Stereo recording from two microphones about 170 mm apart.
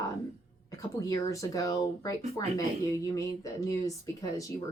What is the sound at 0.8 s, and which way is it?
Speech, 20° left (ahead or behind).